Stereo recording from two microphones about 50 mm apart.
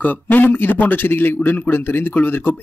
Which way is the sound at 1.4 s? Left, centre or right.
Left.